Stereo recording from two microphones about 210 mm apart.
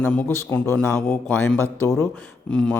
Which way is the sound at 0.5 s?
10° left (ahead or behind).